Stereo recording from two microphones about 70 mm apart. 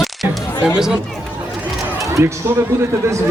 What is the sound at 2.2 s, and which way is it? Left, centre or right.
Speech, right.